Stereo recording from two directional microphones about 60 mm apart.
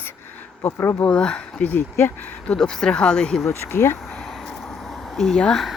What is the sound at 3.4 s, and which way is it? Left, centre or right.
Speech, left.